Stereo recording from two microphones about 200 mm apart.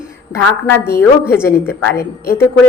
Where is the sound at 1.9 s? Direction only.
50° left (ahead or behind).